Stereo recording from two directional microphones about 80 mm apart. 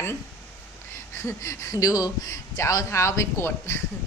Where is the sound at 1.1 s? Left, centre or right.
Left.